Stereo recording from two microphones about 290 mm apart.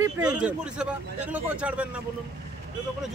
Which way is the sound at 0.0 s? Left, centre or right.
Centre.